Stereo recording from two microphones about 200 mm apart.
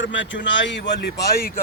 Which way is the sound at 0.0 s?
65° left (ahead or behind).